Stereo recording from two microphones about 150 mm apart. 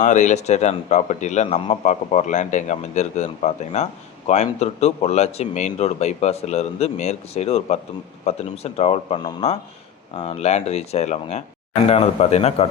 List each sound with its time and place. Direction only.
0.0 s speech: 55° left (ahead or behind)